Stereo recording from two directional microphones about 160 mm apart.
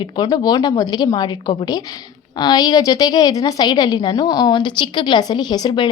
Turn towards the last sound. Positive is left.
turn(degrees=25)  # may be behind; listen again after turning